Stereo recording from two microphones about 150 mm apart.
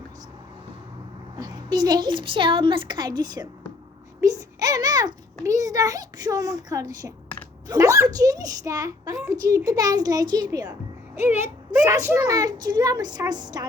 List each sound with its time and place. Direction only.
1.4 s a child's voice: 30° right (ahead or behind)
11.1 s a child's voice: 10° right (ahead or behind); by 13.7 s 25° right (ahead or behind)